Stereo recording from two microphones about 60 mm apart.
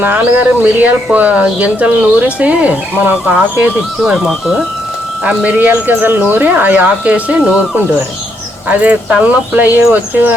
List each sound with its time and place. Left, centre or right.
0.6 s speech: right
4.0 s speech: centre
5.2 s speech: right
8.8 s speech: right